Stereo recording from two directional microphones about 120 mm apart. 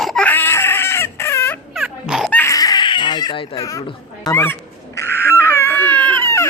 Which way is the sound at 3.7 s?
30° left (ahead or behind).